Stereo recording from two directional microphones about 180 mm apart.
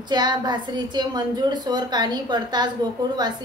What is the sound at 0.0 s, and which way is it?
A woman's voice, 25° right (ahead or behind).